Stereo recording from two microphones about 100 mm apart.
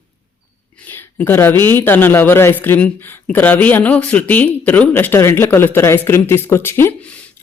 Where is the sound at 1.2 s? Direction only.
20° left (ahead or behind).